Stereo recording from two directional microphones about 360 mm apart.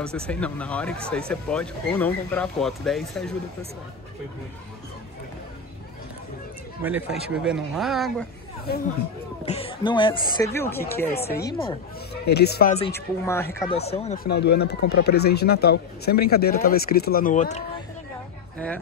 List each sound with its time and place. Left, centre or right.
0.0 s speech: centre
6.8 s speech: centre
8.7 s speech: left
9.5 s speech: centre
12.4 s speech: left